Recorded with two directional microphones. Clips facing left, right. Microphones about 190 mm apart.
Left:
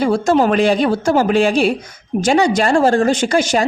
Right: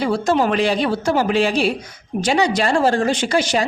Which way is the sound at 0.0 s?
45° left (ahead or behind).